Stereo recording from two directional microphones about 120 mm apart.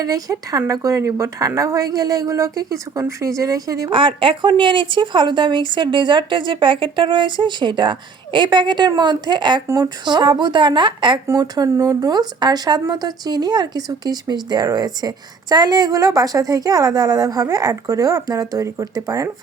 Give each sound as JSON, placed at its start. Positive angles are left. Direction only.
{"t": 0.0, "sound": "a woman's voice", "side_deg": -30}
{"t": 3.8, "sound": "speech", "side_deg": -45}
{"t": 9.6, "sound": "speech", "side_deg": -30}